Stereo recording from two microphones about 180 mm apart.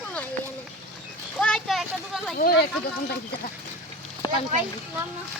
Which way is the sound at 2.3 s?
55° left (ahead or behind).